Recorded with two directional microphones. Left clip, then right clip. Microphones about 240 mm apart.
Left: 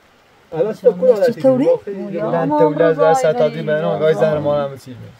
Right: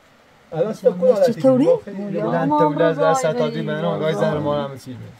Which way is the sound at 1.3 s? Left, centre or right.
Centre.